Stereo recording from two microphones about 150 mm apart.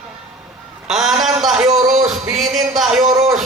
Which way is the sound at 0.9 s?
Centre (ahead or behind).